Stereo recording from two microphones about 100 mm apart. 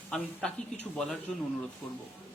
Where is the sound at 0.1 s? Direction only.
5° left (ahead or behind).